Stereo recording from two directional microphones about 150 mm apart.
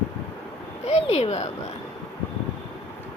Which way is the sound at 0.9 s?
45° left (ahead or behind).